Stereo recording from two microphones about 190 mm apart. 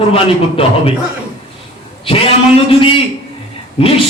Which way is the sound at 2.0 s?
30° left (ahead or behind).